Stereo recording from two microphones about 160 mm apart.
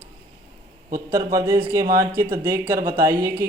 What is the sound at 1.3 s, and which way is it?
A man's voice, 15° right (ahead or behind).